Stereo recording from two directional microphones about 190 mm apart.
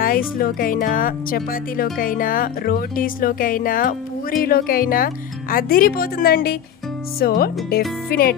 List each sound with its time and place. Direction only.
0.0 s speech: 50° left (ahead or behind)